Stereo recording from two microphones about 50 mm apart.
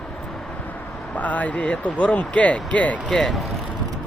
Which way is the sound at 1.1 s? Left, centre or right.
Left.